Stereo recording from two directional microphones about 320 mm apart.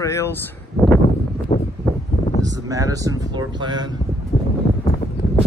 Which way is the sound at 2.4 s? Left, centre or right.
Centre.